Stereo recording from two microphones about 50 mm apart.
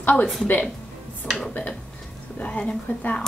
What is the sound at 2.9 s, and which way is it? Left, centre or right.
Speech, left.